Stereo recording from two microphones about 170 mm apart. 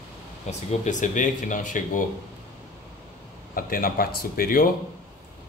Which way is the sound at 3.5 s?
55° left (ahead or behind).